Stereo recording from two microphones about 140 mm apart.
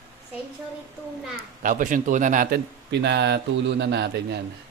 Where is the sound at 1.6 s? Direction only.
70° right (ahead or behind).